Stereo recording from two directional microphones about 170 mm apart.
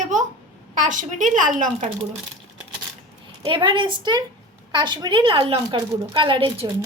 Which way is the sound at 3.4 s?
30° right (ahead or behind).